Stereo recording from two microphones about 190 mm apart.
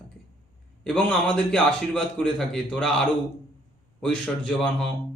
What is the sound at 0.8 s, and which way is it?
A man's voice, 5° left (ahead or behind).